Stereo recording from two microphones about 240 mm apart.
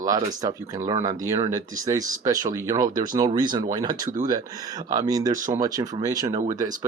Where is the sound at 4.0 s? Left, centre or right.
Right.